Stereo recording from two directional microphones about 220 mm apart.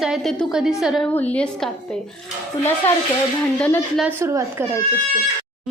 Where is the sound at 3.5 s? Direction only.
5° left (ahead or behind).